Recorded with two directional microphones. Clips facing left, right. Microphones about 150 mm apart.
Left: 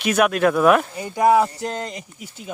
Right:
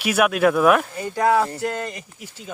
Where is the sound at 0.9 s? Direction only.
15° left (ahead or behind).